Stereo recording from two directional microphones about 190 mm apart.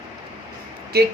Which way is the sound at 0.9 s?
55° right (ahead or behind).